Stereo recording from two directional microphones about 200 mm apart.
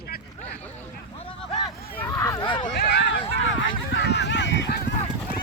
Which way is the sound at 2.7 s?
55° left (ahead or behind).